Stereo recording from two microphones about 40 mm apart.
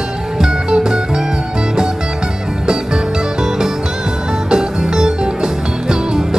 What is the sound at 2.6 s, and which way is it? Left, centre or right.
Music, centre.